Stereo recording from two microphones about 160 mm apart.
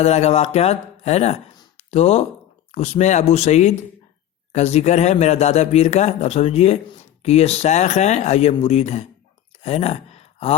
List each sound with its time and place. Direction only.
0.0 s a man's voice: 40° left (ahead or behind)
9.6 s gasp: 40° left (ahead or behind)